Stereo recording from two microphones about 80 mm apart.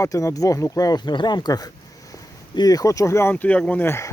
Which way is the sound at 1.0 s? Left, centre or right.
Left.